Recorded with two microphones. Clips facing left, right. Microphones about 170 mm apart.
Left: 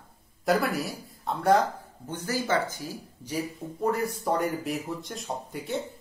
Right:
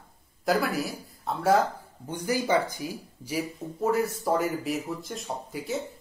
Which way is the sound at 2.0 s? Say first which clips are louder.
Right 2 dB; 15° right (ahead or behind).